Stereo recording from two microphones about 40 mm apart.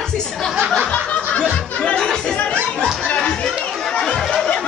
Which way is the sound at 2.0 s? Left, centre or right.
Centre.